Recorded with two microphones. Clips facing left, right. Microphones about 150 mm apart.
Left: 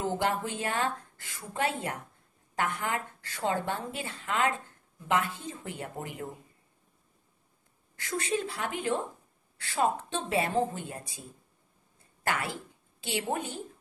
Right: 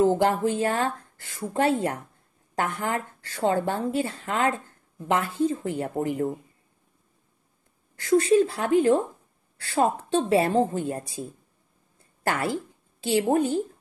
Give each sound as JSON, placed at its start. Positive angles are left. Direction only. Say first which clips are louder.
{"t": 0.0, "sound": "speech", "louder": "right 9 dB", "side_deg": -40}
{"t": 8.0, "sound": "speech", "louder": "right 13 dB", "side_deg": -35}